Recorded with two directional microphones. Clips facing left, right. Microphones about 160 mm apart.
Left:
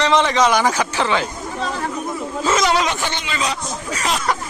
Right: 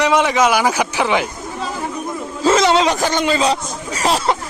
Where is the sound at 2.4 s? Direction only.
30° right (ahead or behind).